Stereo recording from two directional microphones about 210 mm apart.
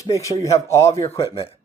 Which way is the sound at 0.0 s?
15° left (ahead or behind).